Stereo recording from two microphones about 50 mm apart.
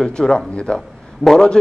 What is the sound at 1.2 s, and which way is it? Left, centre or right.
Speech, centre.